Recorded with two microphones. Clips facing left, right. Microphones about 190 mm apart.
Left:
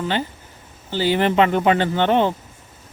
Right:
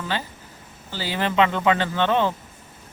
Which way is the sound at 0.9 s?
30° left (ahead or behind).